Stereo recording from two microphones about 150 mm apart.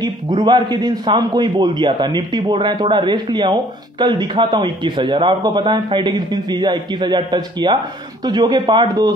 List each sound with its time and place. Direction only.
0.0 s a man's voice: 30° right (ahead or behind)